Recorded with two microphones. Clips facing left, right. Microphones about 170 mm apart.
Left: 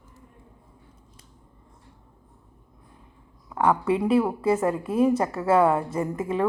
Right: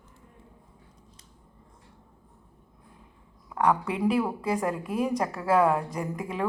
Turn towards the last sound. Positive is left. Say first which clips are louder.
# left 6 dB
turn(degrees=0)  # may be behind; listen again after turning